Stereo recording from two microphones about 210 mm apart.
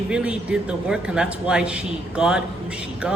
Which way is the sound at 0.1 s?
5° right (ahead or behind).